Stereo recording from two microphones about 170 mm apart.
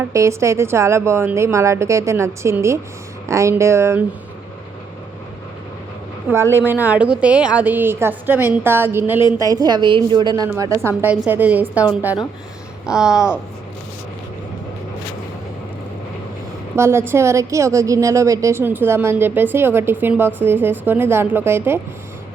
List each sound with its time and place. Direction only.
0.1 s a woman's voice: 15° right (ahead or behind)
6.3 s a woman's voice: 15° right (ahead or behind)
12.8 s speech: 5° right (ahead or behind)
16.7 s a woman's voice: 15° right (ahead or behind)